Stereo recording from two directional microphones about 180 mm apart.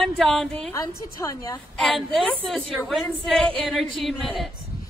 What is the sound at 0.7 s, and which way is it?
Speech, 15° left (ahead or behind).